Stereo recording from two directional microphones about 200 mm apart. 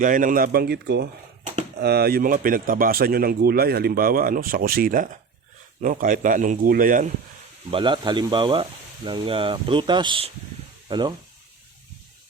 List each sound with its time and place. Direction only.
0.0 s a man's voice: 40° right (ahead or behind)
7.7 s speech: 25° right (ahead or behind)